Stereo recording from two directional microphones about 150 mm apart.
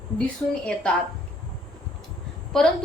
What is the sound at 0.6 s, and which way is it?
Speech, 5° left (ahead or behind).